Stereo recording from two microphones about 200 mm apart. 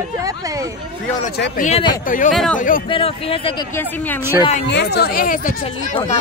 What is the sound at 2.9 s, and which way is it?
Speech, 25° left (ahead or behind).